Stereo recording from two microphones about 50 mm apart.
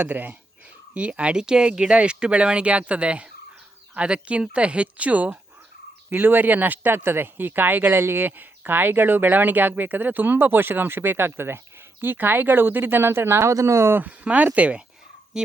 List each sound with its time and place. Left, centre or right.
0.0 s speech: right
6.1 s speech: right
14.0 s speech: right
15.3 s speech: centre